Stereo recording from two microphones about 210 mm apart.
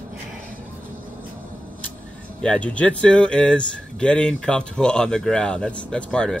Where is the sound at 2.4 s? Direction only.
5° left (ahead or behind).